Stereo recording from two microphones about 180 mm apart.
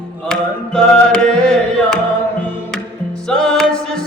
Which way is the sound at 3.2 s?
5° left (ahead or behind).